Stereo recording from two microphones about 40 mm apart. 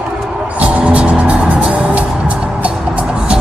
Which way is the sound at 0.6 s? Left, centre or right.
Right.